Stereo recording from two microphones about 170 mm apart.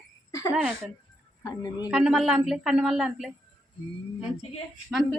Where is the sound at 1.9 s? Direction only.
5° right (ahead or behind).